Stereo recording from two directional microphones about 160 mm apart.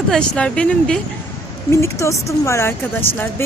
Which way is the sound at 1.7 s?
20° left (ahead or behind).